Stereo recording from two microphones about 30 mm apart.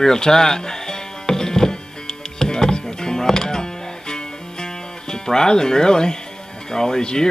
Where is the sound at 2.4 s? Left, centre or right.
Left.